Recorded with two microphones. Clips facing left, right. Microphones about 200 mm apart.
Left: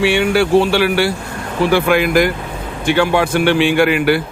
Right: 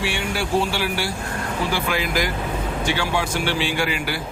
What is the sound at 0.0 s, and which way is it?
Speech, 70° left (ahead or behind).